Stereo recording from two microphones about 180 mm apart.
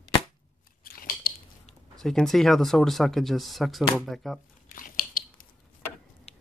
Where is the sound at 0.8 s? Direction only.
55° left (ahead or behind).